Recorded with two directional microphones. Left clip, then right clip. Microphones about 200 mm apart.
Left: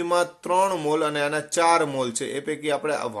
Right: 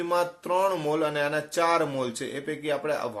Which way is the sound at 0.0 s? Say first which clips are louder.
Left 3 dB; 40° left (ahead or behind).